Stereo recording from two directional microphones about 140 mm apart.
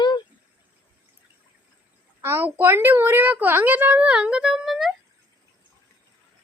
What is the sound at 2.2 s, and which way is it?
A woman's voice, 15° right (ahead or behind).